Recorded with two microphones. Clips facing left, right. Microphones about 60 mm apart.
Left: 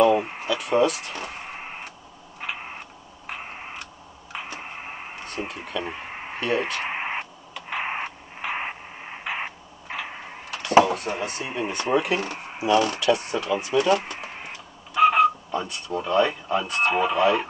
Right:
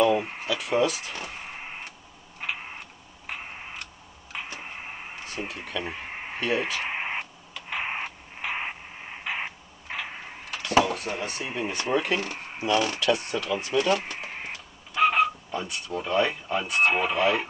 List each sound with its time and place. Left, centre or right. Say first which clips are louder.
0.0 s a sound: left 3 dB; centre
4.3 s a sound: left 2 dB; centre
7.7 s radio: left 2 dB; centre
11.1 s speech: left 2 dB; centre
13.0 s speech: left 3 dB; centre
15.0 s speech: left 5 dB; centre